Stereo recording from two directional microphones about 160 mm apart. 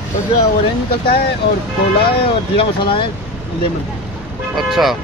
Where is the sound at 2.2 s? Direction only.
35° left (ahead or behind).